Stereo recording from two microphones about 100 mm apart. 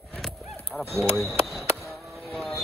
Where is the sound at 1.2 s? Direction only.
Centre (ahead or behind).